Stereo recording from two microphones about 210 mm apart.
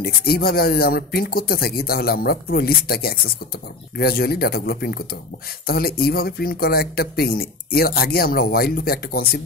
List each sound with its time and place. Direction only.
0.0 s speech: 45° left (ahead or behind)